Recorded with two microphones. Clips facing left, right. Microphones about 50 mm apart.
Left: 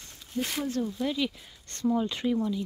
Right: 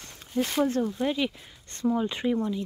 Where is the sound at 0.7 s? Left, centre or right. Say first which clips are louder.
Right 3 dB; right.